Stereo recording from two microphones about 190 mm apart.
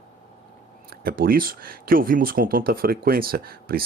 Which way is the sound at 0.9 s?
50° right (ahead or behind).